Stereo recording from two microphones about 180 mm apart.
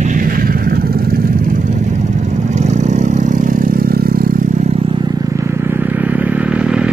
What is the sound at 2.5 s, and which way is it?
Vehicle, 40° right (ahead or behind).